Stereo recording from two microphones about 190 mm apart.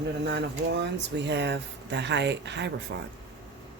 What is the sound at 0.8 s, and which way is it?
Speech, 65° right (ahead or behind).